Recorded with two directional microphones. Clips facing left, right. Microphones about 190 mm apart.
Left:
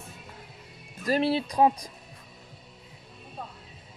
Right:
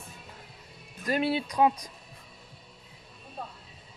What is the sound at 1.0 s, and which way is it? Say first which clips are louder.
Speech: left 3 dB; 35° left (ahead or behind).